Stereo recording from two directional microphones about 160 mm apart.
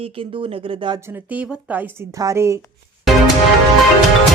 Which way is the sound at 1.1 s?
10° right (ahead or behind).